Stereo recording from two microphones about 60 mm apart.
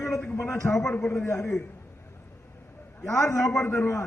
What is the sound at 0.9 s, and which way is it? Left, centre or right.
Speech, left.